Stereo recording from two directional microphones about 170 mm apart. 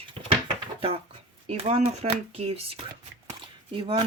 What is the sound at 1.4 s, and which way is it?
Speech, 35° right (ahead or behind).